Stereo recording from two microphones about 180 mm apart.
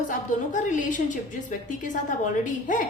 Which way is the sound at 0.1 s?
45° left (ahead or behind).